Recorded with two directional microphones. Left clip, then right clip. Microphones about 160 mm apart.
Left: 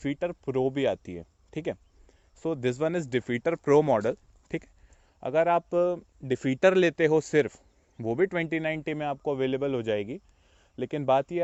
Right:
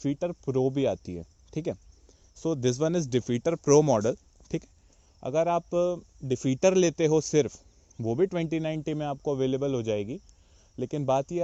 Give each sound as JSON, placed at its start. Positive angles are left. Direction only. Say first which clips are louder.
{"t": 0.0, "sound": "speech", "louder": "even", "side_deg": 15}
{"t": 5.2, "sound": "speech", "louder": "left 2 dB", "side_deg": 30}